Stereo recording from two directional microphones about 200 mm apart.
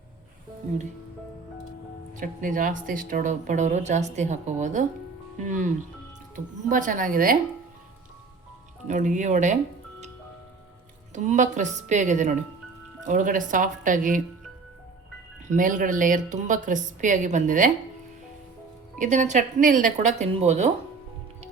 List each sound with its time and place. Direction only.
2.1 s a woman's voice: 40° right (ahead or behind)
8.9 s speech: 40° right (ahead or behind)
11.1 s speech: 35° right (ahead or behind)
15.5 s speech: 40° right (ahead or behind)
18.9 s speech: 40° right (ahead or behind)